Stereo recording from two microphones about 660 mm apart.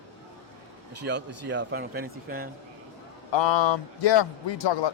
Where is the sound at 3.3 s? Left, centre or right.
Left.